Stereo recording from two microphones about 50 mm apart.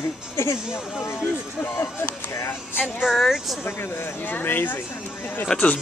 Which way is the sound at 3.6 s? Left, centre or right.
Left.